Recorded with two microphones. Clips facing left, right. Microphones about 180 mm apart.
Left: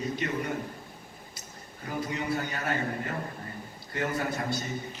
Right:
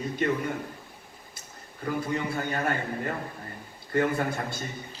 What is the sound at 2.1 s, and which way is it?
A man's voice, 50° right (ahead or behind).